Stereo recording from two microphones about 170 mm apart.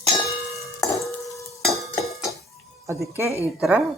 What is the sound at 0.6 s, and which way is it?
Dishes, 20° left (ahead or behind).